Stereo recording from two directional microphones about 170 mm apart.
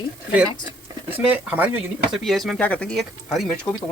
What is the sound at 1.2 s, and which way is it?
Speech, 10° right (ahead or behind).